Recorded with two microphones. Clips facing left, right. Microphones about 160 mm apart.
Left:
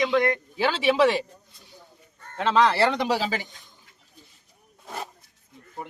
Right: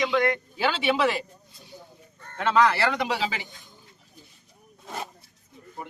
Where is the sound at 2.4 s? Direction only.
30° left (ahead or behind).